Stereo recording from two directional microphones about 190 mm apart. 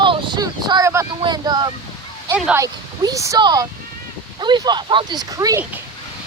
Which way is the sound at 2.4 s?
5° right (ahead or behind).